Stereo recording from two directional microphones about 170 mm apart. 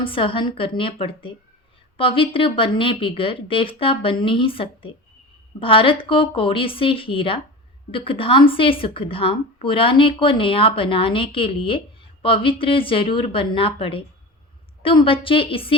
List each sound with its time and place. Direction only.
0.0 s a woman's voice: 30° left (ahead or behind)